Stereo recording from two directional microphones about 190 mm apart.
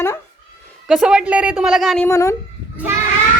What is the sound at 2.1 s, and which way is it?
Speech, 15° left (ahead or behind).